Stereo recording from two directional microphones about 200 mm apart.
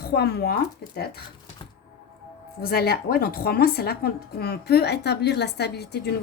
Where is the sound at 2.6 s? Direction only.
50° left (ahead or behind).